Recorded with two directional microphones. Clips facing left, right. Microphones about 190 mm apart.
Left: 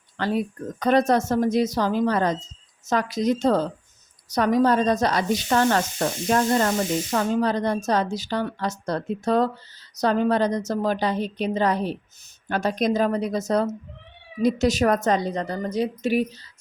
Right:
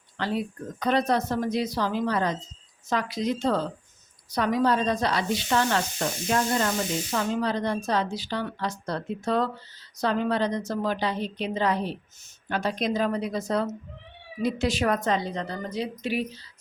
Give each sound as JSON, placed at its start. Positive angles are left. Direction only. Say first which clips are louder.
{"t": 0.2, "sound": "speech", "louder": "left 4 dB", "side_deg": 45}